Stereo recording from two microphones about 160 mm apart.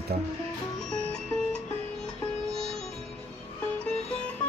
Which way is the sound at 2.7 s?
5° left (ahead or behind).